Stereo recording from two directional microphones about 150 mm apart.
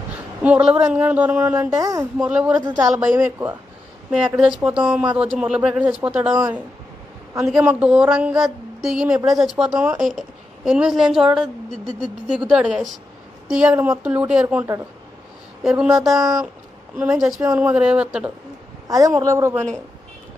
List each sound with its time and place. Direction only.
0.1 s a sound: 10° right (ahead or behind)
0.9 s speech: 10° right (ahead or behind)
1.7 s a woman's voice: 25° right (ahead or behind)
2.1 s speech: 10° right (ahead or behind)
2.5 s a woman's voice: 25° right (ahead or behind)
3.2 s speech: 15° right (ahead or behind)
4.6 s a woman's voice: 10° right (ahead or behind)
18.9 s a woman's voice: 25° right (ahead or behind)